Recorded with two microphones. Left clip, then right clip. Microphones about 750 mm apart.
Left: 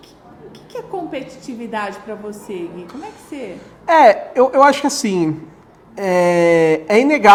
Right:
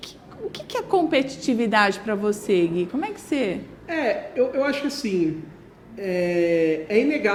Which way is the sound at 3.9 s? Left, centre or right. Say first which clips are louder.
Left 15 dB; left.